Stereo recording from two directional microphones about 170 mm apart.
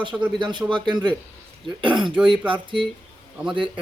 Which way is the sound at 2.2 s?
30° right (ahead or behind).